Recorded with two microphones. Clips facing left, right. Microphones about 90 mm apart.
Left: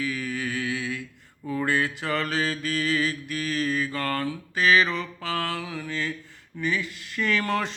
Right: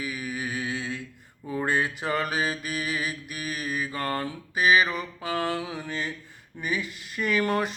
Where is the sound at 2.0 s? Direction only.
20° right (ahead or behind).